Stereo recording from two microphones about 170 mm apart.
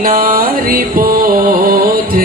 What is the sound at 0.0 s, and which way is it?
Music, 55° right (ahead or behind).